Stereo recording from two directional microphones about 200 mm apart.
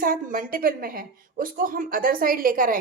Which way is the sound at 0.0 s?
45° right (ahead or behind).